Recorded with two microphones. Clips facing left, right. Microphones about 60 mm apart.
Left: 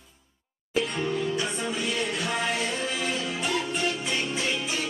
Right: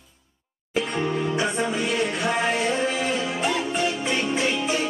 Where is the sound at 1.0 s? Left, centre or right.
Right.